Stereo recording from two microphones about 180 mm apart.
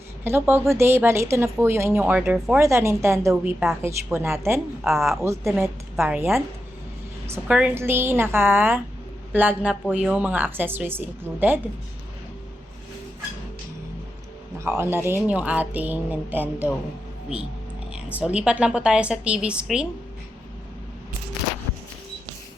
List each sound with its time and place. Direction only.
0.3 s speech: 10° right (ahead or behind)
4.9 s speech: centre (ahead or behind)
5.2 s speech: 15° right (ahead or behind)
14.6 s speech: 15° right (ahead or behind)
17.9 s speech: 5° right (ahead or behind)